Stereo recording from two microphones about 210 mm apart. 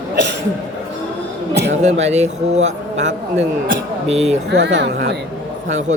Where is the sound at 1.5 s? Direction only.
50° right (ahead or behind).